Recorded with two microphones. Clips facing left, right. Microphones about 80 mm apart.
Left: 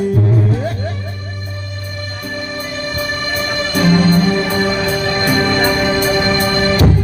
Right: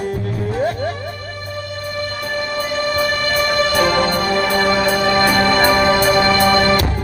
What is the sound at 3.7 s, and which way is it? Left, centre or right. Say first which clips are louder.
Music: left 2 dB; right.